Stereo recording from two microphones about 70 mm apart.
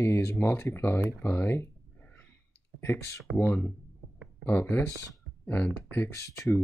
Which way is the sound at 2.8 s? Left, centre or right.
Left.